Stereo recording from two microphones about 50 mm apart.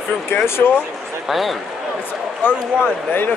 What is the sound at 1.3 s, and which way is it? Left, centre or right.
Speech, centre.